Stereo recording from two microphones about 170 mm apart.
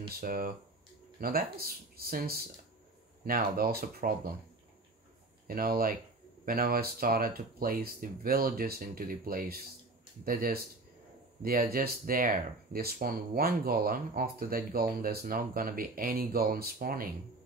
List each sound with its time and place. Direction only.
0.2 s speech: 60° right (ahead or behind)
5.5 s speech: 60° right (ahead or behind)